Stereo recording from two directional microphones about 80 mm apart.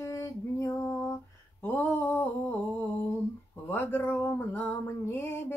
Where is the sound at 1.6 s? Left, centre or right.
Left.